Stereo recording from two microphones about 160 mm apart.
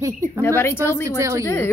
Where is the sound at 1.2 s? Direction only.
20° right (ahead or behind).